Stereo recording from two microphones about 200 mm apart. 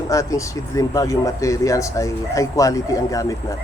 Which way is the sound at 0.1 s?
15° left (ahead or behind).